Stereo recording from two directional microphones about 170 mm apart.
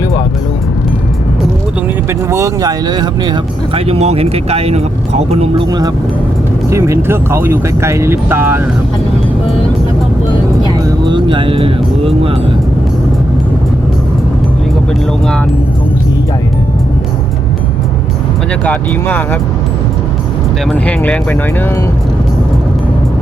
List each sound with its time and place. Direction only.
2.0 s speech: 20° right (ahead or behind); by 5.6 s 40° right (ahead or behind)
6.7 s speech: 15° right (ahead or behind)
10.8 s music: 25° right (ahead or behind)
18.6 s speech: 10° left (ahead or behind)
20.7 s speech: 10° left (ahead or behind)